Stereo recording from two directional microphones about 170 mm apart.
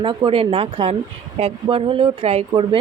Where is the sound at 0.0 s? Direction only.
30° right (ahead or behind).